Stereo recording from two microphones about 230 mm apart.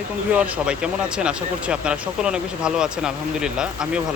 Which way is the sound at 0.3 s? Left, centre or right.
Centre.